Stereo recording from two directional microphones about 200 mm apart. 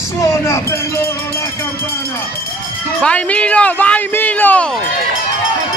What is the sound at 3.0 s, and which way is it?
Speech, 5° left (ahead or behind).